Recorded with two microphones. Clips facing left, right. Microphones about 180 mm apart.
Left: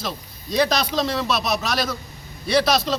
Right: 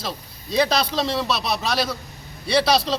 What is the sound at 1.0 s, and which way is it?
Speech, 5° right (ahead or behind).